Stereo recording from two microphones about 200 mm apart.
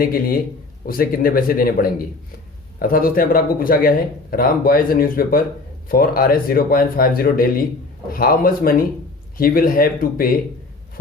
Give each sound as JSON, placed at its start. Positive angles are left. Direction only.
{"t": 0.0, "sound": "speech", "side_deg": 45}